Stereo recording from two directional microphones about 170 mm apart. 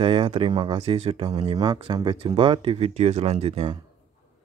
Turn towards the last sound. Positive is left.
turn(degrees=-30)  # may be behind; listen again after turning